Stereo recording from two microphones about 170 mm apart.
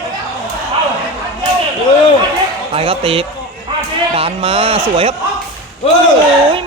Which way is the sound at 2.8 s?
35° right (ahead or behind).